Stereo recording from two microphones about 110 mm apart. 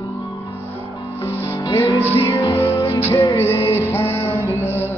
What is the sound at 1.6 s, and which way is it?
Music, 45° left (ahead or behind).